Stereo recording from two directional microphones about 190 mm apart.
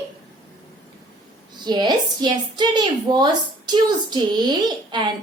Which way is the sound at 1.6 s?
25° right (ahead or behind).